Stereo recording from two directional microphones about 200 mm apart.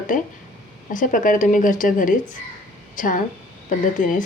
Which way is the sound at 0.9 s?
40° left (ahead or behind).